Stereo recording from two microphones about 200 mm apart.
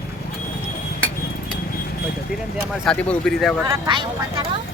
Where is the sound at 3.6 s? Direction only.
25° right (ahead or behind).